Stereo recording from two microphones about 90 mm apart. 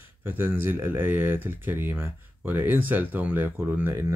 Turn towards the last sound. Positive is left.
turn(degrees=-25)  # may be behind; listen again after turning